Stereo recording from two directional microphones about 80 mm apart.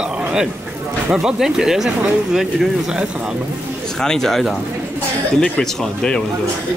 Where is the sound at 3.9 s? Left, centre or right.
Centre.